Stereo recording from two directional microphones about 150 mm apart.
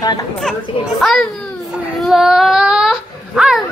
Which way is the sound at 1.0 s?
Centre (ahead or behind).